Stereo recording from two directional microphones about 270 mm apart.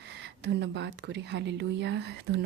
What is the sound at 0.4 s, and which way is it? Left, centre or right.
Speech, right.